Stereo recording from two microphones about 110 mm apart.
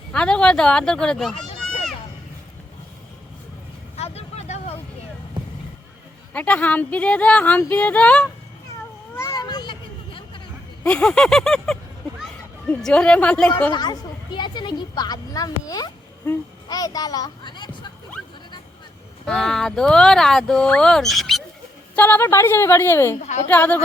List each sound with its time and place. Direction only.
0.1 s speech: 10° left (ahead or behind)
1.6 s a sound: centre (ahead or behind)
3.9 s vehicle: 70° left (ahead or behind)
6.3 s speech: 15° left (ahead or behind)
9.3 s a sound: 40° left (ahead or behind)
10.8 s speech: 10° left (ahead or behind)
13.7 s speech: 40° left (ahead or behind)
19.2 s speech: 5° left (ahead or behind)
21.9 s a woman's voice: 15° left (ahead or behind)
23.2 s a woman's voice: 90° left
23.5 s speech: 15° left (ahead or behind)